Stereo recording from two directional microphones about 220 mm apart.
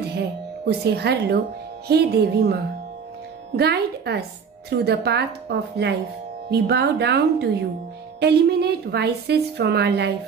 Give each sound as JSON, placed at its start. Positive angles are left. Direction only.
{"t": 0.2, "sound": "a woman's voice", "side_deg": -45}